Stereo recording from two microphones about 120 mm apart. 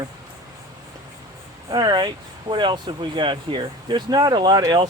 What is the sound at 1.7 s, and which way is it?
Speech, 35° right (ahead or behind).